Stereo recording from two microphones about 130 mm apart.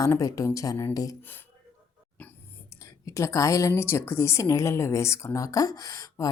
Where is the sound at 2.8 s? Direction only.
25° left (ahead or behind).